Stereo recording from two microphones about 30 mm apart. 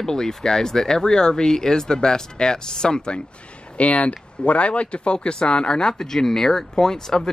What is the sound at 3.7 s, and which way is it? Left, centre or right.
Speech, left.